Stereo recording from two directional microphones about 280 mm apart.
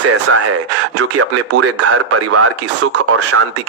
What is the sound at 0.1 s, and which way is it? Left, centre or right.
Speech, right.